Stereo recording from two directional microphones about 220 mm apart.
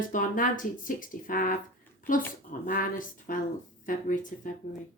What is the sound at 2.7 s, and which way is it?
Speech, 40° left (ahead or behind).